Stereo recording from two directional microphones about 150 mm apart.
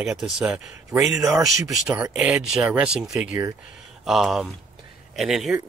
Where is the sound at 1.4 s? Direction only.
Centre (ahead or behind).